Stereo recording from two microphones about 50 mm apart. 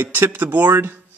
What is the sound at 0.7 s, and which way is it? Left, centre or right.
Speech, right.